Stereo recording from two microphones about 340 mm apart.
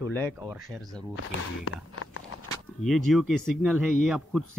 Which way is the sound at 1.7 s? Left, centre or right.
Left.